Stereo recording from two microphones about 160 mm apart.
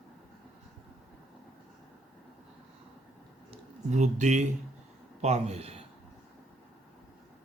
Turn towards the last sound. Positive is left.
turn(degrees=-40)  # may be behind; listen again after turning